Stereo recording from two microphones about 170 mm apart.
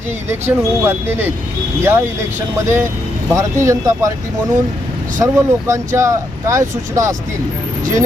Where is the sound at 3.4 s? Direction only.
15° right (ahead or behind).